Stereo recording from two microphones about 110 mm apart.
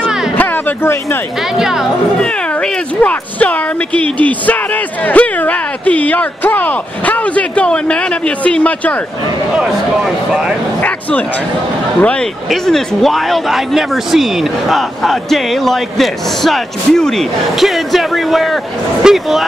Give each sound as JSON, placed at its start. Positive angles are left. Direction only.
{"t": 0.4, "sound": "a sound", "side_deg": 15}
{"t": 1.6, "sound": "speech", "side_deg": -5}
{"t": 2.1, "sound": "speech", "side_deg": 10}
{"t": 9.6, "sound": "speech", "side_deg": -5}
{"t": 10.8, "sound": "speech", "side_deg": 15}
{"t": 12.4, "sound": "speech", "side_deg": 5}